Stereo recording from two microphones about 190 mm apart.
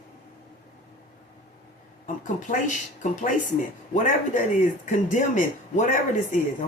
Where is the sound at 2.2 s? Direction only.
40° left (ahead or behind).